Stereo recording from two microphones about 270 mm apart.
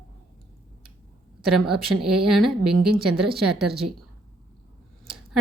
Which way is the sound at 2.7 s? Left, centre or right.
Right.